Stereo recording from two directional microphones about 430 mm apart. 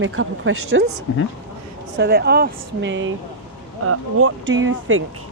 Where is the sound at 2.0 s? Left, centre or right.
Right.